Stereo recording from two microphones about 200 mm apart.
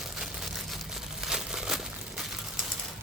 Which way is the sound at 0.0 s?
Centre (ahead or behind).